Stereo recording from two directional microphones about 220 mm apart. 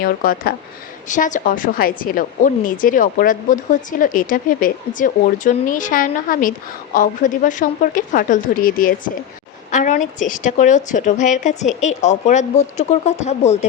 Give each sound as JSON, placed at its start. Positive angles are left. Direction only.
{"t": 0.0, "sound": "a woman's voice", "side_deg": 40}